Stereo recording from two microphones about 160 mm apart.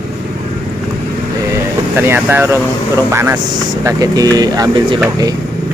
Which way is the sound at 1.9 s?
15° right (ahead or behind).